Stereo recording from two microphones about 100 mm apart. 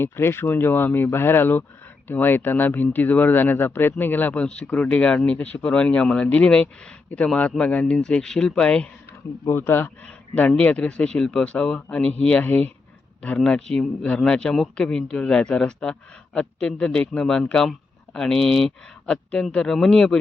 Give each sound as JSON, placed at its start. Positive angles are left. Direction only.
{"t": 0.0, "sound": "speech", "side_deg": 25}
{"t": 9.5, "sound": "speech", "side_deg": 25}